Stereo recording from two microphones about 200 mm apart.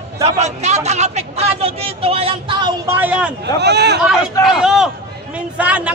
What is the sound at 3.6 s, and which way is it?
Speech, 55° right (ahead or behind).